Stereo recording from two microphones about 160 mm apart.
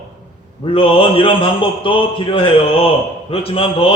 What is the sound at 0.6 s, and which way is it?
A man's voice, 35° left (ahead or behind).